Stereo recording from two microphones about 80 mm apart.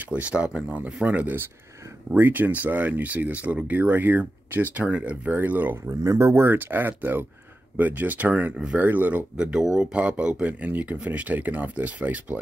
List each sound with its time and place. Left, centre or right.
0.1 s speech: centre
5.9 s speech: right; by 12.4 s centre